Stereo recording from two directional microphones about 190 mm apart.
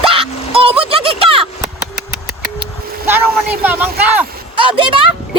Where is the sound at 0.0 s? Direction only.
30° right (ahead or behind).